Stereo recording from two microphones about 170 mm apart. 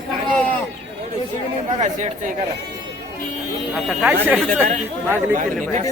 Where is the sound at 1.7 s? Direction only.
45° right (ahead or behind).